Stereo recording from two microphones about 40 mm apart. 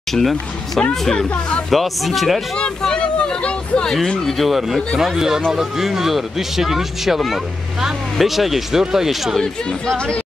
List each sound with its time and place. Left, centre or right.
0.1 s speech: centre
1.7 s speech: centre
2.9 s a sound: left
4.3 s speech: centre
8.2 s speech: centre
9.7 s speech: left